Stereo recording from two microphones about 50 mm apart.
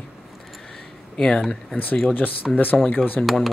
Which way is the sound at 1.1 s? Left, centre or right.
Centre.